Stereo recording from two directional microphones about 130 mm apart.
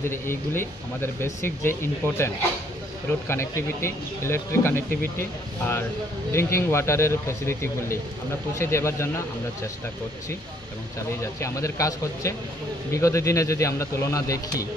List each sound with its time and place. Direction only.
0.0 s speech: 20° left (ahead or behind)
6.3 s speech: 20° left (ahead or behind)
11.1 s speech: 20° left (ahead or behind)